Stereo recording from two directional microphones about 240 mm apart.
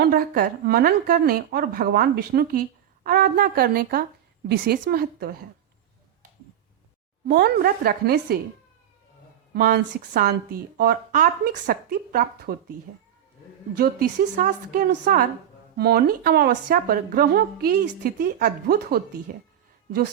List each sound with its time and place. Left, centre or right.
0.0 s a woman's voice: right
7.3 s a woman's voice: right
9.6 s a woman's voice: right
13.7 s a woman's voice: right